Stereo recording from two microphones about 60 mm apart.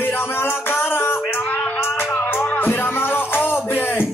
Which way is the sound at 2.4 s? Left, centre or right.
Left.